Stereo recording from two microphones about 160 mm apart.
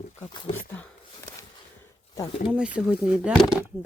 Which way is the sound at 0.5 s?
10° left (ahead or behind).